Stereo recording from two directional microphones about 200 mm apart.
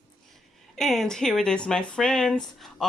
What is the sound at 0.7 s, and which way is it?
Speech, centre (ahead or behind).